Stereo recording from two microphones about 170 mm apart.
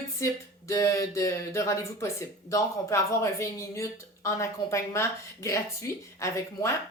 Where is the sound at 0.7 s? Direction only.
20° left (ahead or behind).